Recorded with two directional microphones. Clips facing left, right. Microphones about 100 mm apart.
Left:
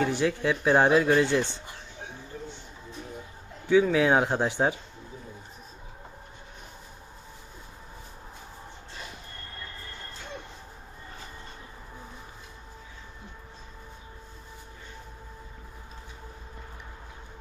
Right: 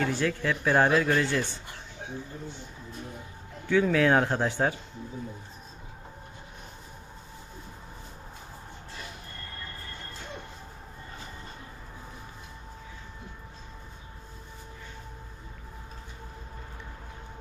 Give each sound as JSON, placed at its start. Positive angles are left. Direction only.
{"t": 0.0, "sound": "speech", "side_deg": 15}
{"t": 3.7, "sound": "speech", "side_deg": 15}